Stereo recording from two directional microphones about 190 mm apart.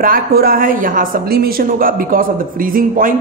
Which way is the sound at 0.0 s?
50° right (ahead or behind).